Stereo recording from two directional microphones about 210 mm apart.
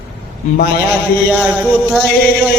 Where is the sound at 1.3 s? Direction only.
5° right (ahead or behind).